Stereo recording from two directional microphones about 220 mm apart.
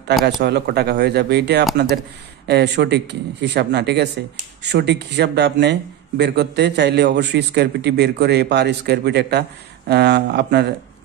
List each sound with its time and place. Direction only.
0.4 s speech: 50° right (ahead or behind)